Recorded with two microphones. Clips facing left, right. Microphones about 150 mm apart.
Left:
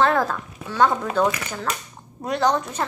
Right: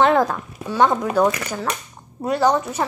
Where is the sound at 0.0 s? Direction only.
15° right (ahead or behind).